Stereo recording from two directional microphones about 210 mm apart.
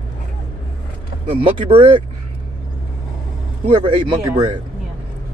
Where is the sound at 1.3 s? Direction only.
25° right (ahead or behind).